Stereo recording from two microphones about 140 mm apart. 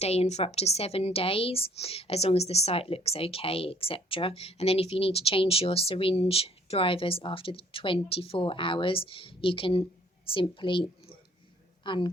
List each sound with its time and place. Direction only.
0.0 s a woman's voice: 50° left (ahead or behind)